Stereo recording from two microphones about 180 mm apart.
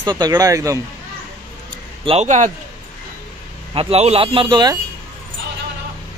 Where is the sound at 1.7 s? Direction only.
35° right (ahead or behind).